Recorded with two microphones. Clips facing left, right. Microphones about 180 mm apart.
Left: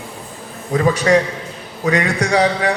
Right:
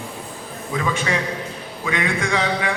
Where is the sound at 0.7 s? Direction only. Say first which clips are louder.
Left 9 dB; 40° left (ahead or behind).